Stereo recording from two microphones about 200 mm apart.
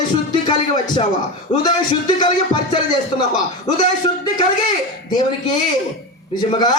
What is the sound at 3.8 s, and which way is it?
A man's voice, 20° left (ahead or behind).